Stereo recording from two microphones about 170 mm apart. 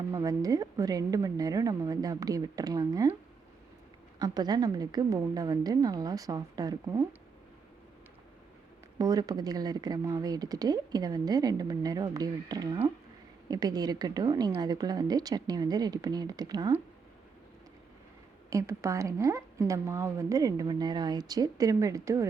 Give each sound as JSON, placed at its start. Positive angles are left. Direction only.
{"t": 0.1, "sound": "speech", "side_deg": -20}
{"t": 4.2, "sound": "speech", "side_deg": -25}
{"t": 9.0, "sound": "speech", "side_deg": -20}
{"t": 18.5, "sound": "speech", "side_deg": -15}